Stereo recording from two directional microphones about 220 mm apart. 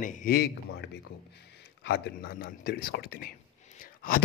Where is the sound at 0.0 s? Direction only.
35° left (ahead or behind).